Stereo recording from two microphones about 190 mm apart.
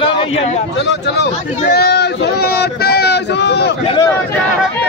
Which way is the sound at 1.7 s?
60° left (ahead or behind).